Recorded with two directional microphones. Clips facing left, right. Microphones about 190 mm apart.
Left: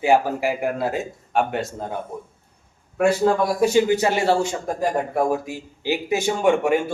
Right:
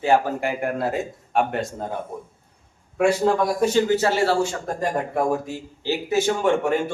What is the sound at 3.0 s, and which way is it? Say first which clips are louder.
A man's voice: left 1 dB; 5° left (ahead or behind).